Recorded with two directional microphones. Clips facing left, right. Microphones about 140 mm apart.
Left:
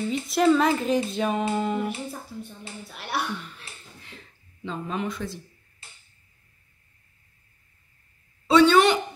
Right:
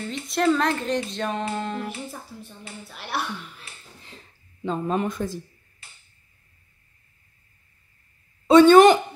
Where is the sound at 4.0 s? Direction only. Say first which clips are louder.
Even; 35° right (ahead or behind).